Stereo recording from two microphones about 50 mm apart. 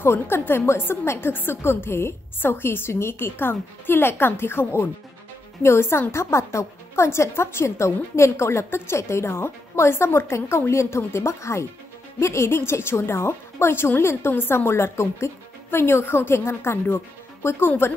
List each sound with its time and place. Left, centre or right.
0.0 s a woman's voice: left